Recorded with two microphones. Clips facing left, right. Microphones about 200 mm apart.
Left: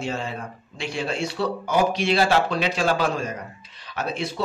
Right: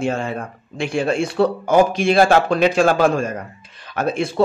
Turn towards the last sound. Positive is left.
turn(degrees=-50)  # may be behind; listen again after turning